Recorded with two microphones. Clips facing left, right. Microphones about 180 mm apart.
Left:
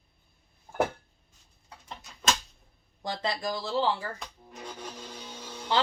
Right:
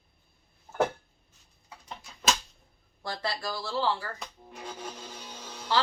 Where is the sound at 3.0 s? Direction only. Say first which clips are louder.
Left 2 dB; 20° left (ahead or behind).